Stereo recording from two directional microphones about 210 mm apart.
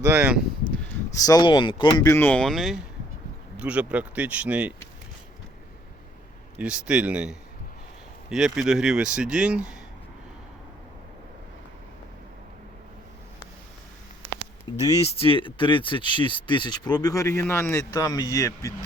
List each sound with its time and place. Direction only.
0.0 s speech: 10° right (ahead or behind)
0.7 s speech: 10° left (ahead or behind); by 4.7 s 5° right (ahead or behind)
6.6 s a man's voice: 5° right (ahead or behind)
14.7 s speech: 20° left (ahead or behind)